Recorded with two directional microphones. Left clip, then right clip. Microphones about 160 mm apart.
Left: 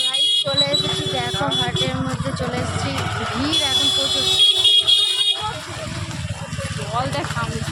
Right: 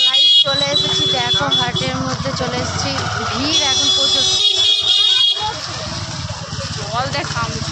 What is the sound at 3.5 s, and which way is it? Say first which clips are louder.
Speech: right 4 dB; 5° left (ahead or behind).